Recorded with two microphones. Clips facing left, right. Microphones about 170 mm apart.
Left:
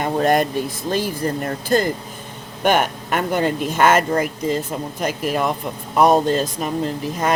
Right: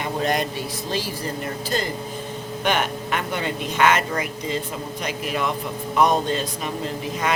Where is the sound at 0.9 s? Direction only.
50° left (ahead or behind).